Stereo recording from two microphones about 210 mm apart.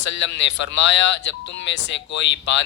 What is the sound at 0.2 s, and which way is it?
A man's voice, 60° left (ahead or behind).